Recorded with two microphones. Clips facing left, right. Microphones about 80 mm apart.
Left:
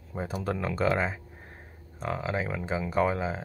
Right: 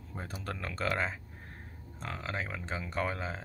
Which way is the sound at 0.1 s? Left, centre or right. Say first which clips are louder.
Left 9 dB; centre.